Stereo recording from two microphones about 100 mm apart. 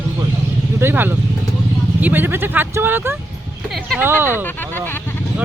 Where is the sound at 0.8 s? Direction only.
20° right (ahead or behind).